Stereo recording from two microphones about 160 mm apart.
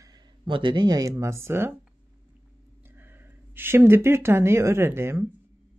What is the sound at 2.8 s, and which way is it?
Speech, 10° right (ahead or behind).